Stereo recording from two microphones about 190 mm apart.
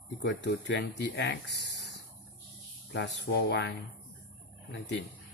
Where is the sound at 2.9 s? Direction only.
75° left (ahead or behind).